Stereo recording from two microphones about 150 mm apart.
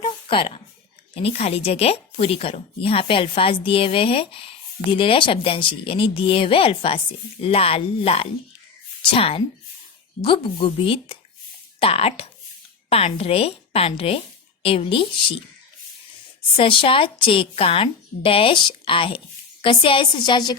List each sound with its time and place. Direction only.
0.0 s a sound: 35° left (ahead or behind)
1.1 s a woman's voice: 45° left (ahead or behind)
16.6 s speech: 35° left (ahead or behind)